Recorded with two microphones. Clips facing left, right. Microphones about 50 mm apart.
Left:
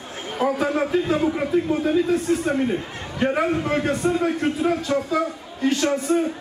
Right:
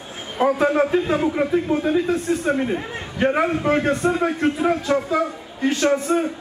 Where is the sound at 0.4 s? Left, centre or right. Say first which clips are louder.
Right 4 dB; centre.